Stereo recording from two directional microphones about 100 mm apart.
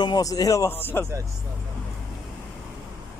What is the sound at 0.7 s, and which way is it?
Speech, 20° left (ahead or behind).